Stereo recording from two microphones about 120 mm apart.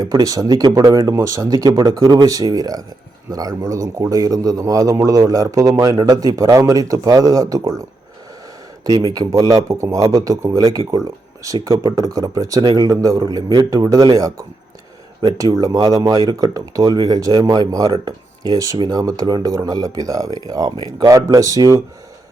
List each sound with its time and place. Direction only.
0.0 s a man's voice: 30° right (ahead or behind)
9.0 s a man's voice: 30° right (ahead or behind)